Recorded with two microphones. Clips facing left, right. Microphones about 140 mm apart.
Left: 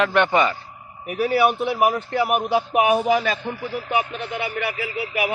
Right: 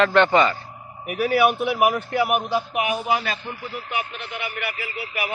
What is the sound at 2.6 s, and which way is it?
Speech, 65° left (ahead or behind).